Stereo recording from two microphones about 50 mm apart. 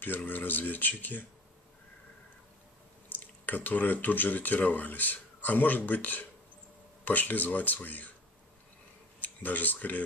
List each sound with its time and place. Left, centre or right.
0.3 s speech: left
3.1 s speech: left
9.2 s speech: left